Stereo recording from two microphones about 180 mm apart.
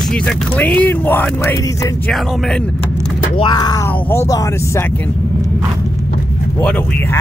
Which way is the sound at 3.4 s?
20° left (ahead or behind).